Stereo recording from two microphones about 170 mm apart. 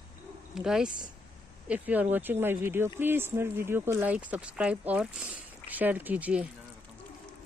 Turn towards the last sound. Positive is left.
turn(degrees=-10)  # may be behind; listen again after turning